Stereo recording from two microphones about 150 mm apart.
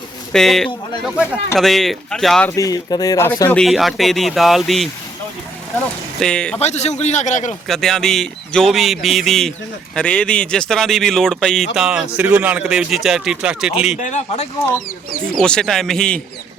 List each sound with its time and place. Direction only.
0.3 s a man's voice: 5° left (ahead or behind)
2.6 s speech: 25° left (ahead or behind)
3.5 s a man's voice: centre (ahead or behind)
6.1 s a man's voice: 5° left (ahead or behind)
6.6 s a man's voice: 45° left (ahead or behind)
7.7 s a man's voice: 5° left (ahead or behind)
14.0 s a man's voice: 50° left (ahead or behind)
15.3 s a man's voice: 5° left (ahead or behind)